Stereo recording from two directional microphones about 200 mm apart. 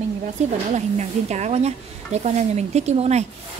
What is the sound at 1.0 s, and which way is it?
Speech, 35° right (ahead or behind).